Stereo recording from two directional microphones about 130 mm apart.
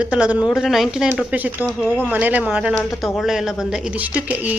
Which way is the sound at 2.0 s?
10° right (ahead or behind).